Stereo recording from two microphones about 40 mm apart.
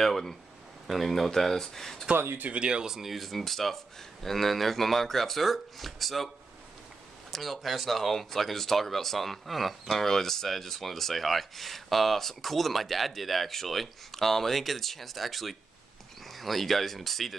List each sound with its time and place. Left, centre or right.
0.0 s speech: centre
2.5 s speech: right
2.9 s speech: centre